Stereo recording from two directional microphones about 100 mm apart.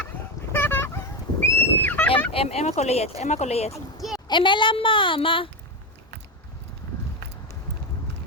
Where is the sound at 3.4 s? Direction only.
90° left.